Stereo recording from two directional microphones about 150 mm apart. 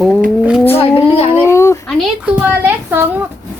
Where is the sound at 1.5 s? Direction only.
20° left (ahead or behind).